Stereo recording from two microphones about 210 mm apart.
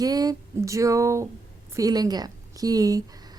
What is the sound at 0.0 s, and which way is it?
A woman's voice, 20° right (ahead or behind).